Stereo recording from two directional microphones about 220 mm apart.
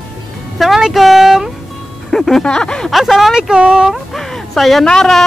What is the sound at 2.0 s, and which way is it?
Speech, centre (ahead or behind).